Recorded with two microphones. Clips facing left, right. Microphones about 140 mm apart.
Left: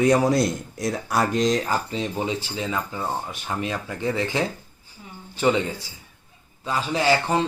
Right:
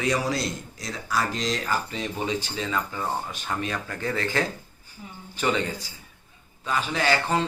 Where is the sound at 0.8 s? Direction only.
55° left (ahead or behind).